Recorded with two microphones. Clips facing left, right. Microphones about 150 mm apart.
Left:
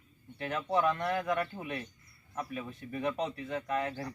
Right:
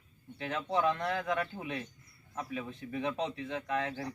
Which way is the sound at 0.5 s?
5° left (ahead or behind).